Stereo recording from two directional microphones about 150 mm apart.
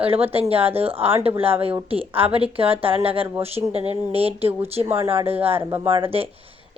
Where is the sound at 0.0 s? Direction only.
40° right (ahead or behind).